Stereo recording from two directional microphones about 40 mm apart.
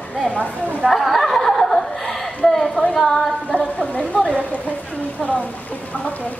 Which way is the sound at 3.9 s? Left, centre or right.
Left.